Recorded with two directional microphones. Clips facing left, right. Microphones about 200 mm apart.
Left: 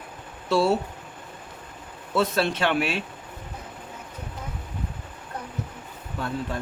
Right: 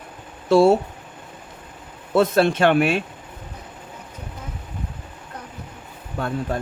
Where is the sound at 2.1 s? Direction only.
50° right (ahead or behind).